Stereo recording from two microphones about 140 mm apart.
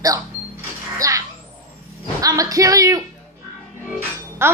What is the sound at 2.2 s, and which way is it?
Rub, 25° right (ahead or behind).